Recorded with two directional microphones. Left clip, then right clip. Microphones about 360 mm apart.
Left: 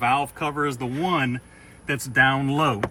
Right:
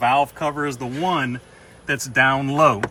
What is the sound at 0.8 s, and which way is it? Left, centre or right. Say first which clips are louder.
Speech: right 2 dB; centre.